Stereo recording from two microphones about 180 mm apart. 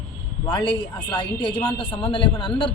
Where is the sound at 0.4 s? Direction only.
25° left (ahead or behind).